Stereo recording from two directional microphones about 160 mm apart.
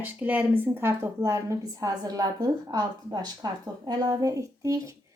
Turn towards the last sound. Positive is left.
turn(degrees=-20)  # may be behind; listen again after turning